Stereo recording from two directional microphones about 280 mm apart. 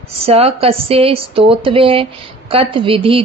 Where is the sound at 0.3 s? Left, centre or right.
Right.